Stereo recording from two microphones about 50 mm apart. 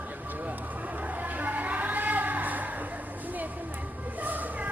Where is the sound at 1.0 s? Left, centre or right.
Right.